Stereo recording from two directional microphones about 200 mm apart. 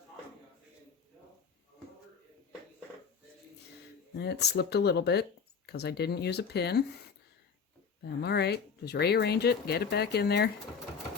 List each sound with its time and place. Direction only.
4.2 s speech: 55° left (ahead or behind)
8.0 s speech: 55° left (ahead or behind)